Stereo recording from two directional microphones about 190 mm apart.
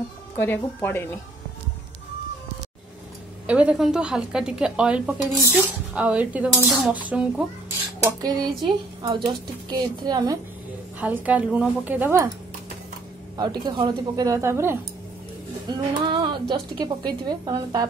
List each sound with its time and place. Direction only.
0.4 s speech: 10° left (ahead or behind)
3.4 s a woman's voice: 5° right (ahead or behind)
8.0 s speech: 20° right (ahead or behind)
11.0 s speech: 10° right (ahead or behind)
13.4 s speech: 20° right (ahead or behind)
16.1 s speech: 25° right (ahead or behind)